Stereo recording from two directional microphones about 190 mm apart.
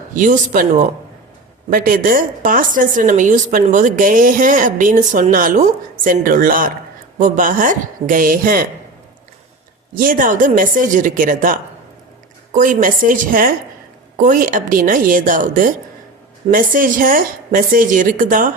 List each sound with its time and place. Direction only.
0.1 s a woman's voice: 45° right (ahead or behind)
9.9 s a woman's voice: 45° right (ahead or behind)